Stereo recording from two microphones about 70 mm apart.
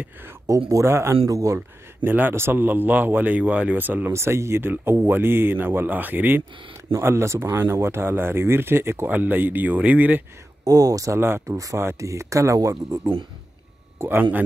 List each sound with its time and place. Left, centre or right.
0.5 s speech: right
2.0 s a man's voice: right
4.1 s speech: right
6.9 s speech: right
10.6 s speech: right
11.1 s speech: right
13.9 s speech: right